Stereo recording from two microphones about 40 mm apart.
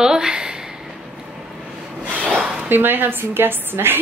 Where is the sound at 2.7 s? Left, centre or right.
Right.